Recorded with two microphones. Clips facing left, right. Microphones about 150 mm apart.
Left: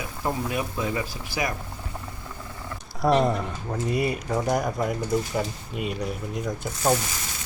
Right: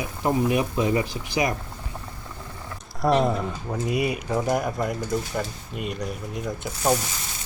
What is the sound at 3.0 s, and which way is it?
Speech, centre (ahead or behind).